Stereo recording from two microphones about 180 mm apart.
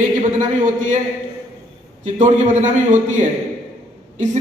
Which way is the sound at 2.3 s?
40° right (ahead or behind).